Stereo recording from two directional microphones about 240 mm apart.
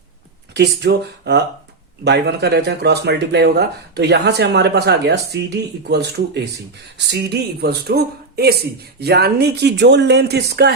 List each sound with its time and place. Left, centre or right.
0.5 s speech: right